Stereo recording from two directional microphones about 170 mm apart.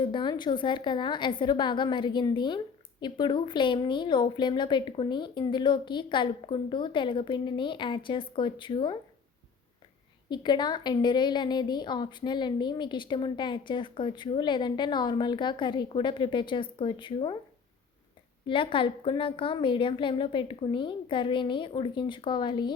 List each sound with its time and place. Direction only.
0.0 s a woman's voice: 25° left (ahead or behind)
10.2 s a woman's voice: 25° left (ahead or behind)
18.4 s a woman's voice: 30° left (ahead or behind)